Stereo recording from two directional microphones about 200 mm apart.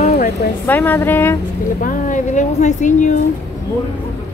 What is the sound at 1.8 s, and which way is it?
A woman's voice, 40° left (ahead or behind).